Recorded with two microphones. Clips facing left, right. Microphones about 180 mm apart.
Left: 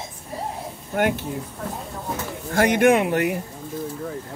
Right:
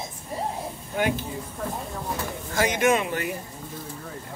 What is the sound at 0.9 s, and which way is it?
Speech, 70° left (ahead or behind).